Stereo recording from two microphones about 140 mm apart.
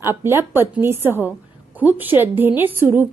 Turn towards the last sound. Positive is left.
turn(degrees=-15)  # may be behind; listen again after turning